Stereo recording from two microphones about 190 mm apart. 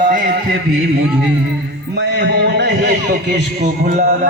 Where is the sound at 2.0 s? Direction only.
65° right (ahead or behind).